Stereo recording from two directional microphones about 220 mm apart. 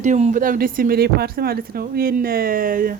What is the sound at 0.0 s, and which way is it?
Speech, 35° right (ahead or behind).